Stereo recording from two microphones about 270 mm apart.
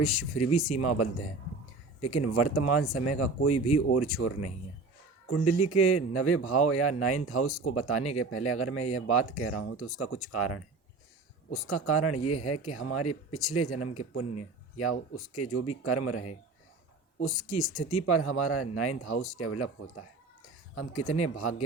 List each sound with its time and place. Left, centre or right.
0.0 s a man's voice: left